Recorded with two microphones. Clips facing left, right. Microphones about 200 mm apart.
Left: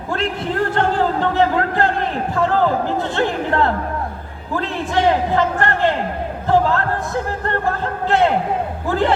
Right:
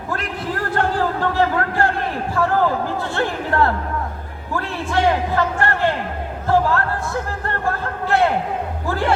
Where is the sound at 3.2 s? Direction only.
20° left (ahead or behind).